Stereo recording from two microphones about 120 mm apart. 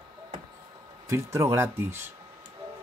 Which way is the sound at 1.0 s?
25° right (ahead or behind).